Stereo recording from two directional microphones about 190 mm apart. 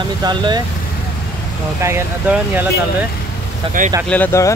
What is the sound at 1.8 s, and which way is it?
Speech, 10° right (ahead or behind).